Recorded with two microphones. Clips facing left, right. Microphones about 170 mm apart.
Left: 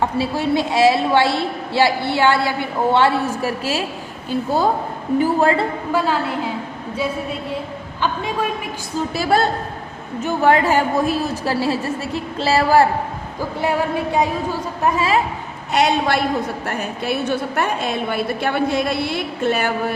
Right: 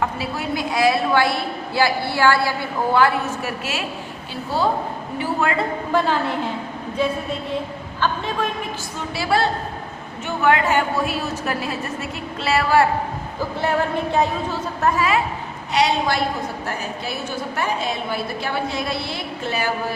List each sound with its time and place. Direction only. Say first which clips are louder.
0.0 s a woman's voice: left 5 dB; 30° left (ahead or behind)
5.2 s a woman's voice: left 4 dB; 35° left (ahead or behind)
5.9 s a woman's voice: even; 5° left (ahead or behind)
8.0 s a woman's voice: left 1 dB; 10° left (ahead or behind)
9.1 s a man's voice: left 2 dB; 45° left (ahead or behind)
13.6 s a woman's voice: left 1 dB; 10° left (ahead or behind)
15.7 s a man's voice: left 2 dB; 55° left (ahead or behind)
17.6 s a woman's voice: left 3 dB; 55° left (ahead or behind)